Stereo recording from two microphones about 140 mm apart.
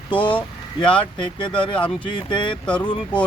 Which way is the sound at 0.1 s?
35° left (ahead or behind).